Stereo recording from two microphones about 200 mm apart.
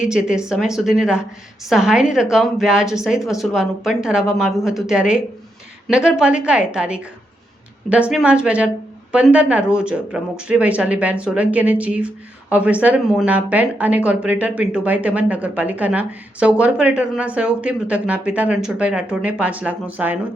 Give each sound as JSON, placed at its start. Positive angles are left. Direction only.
{"t": 0.1, "sound": "a woman's voice", "side_deg": -5}